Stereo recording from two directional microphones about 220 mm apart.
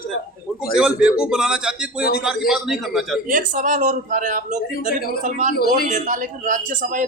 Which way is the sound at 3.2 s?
35° right (ahead or behind).